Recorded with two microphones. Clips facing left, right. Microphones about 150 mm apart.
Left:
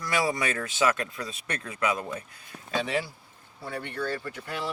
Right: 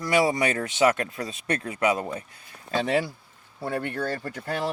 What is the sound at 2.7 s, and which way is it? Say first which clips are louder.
Speech: right 5 dB; 45° right (ahead or behind).